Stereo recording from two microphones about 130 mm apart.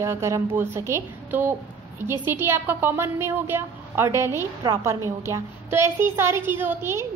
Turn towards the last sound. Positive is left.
turn(degrees=-20)  # may be behind; listen again after turning